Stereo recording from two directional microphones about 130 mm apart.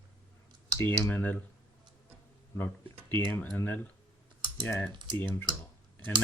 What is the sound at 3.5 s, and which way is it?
Speech, 15° left (ahead or behind).